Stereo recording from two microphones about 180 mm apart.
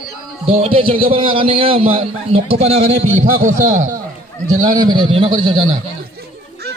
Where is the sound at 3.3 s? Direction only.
50° right (ahead or behind).